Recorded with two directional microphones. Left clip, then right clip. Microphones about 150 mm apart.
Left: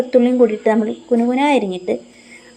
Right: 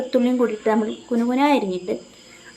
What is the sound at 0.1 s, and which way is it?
A woman's voice, 15° left (ahead or behind).